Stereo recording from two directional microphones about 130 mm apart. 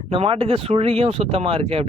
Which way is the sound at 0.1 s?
45° right (ahead or behind).